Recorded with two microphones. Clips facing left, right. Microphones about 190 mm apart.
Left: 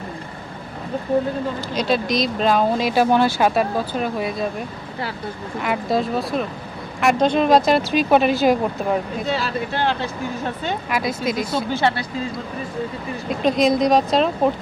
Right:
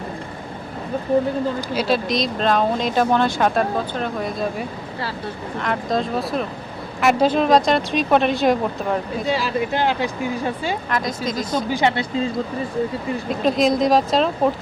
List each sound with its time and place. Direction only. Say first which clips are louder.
1.7 s speech: left 1 dB; 5° right (ahead or behind)
9.3 s speech: right 3 dB; 10° right (ahead or behind)
10.8 s speech: left 1 dB; 10° left (ahead or behind)
11.7 s speech: right 1 dB; 15° right (ahead or behind)
13.4 s speech: left 1 dB; centre (ahead or behind)